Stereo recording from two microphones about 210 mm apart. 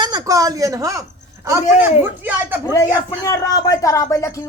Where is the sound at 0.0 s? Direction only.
20° right (ahead or behind).